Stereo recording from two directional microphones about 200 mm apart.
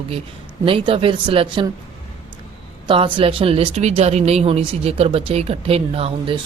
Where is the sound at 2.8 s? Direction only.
25° right (ahead or behind).